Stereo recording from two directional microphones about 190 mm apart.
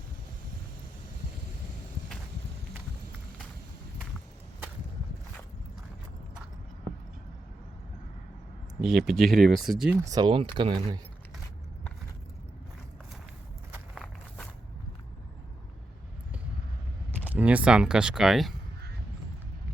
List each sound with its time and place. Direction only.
8.8 s speech: centre (ahead or behind)
10.0 s speech: 20° right (ahead or behind)
13.7 s walk: centre (ahead or behind)
17.3 s speech: 5° right (ahead or behind)